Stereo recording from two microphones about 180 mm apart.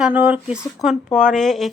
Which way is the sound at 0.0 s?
10° right (ahead or behind).